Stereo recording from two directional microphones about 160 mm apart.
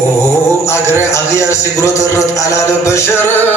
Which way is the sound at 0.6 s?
15° left (ahead or behind).